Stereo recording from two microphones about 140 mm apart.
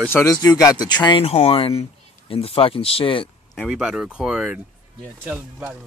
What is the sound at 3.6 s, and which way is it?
Speech, 5° right (ahead or behind).